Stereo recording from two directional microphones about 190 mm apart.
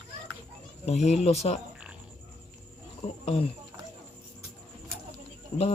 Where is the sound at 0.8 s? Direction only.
35° left (ahead or behind).